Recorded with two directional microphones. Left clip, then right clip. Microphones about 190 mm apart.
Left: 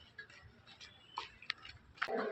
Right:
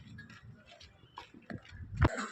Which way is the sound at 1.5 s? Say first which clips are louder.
Left 5 dB; 30° right (ahead or behind).